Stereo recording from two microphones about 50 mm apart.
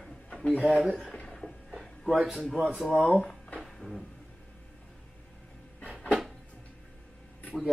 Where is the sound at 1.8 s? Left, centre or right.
Centre.